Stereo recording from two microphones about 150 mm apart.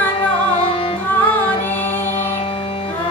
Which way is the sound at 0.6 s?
40° left (ahead or behind).